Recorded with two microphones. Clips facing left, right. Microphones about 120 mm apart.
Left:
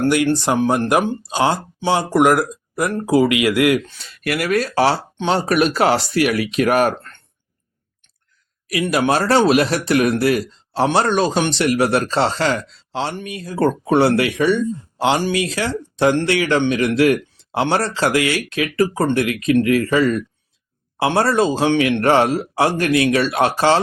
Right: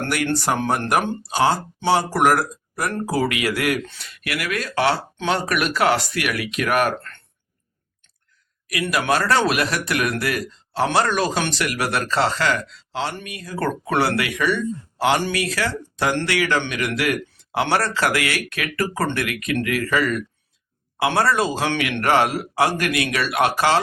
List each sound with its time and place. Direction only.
0.3 s speech: 15° left (ahead or behind)
4.2 s speech: 40° left (ahead or behind)
8.7 s speech: 30° left (ahead or behind)